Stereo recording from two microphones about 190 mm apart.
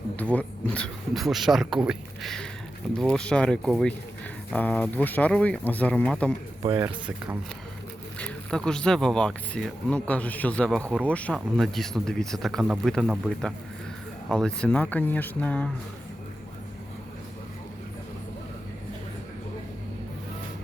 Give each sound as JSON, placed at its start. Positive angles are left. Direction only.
{"t": 0.2, "sound": "speech", "side_deg": 5}
{"t": 6.6, "sound": "speech", "side_deg": -20}
{"t": 8.2, "sound": "speech", "side_deg": 5}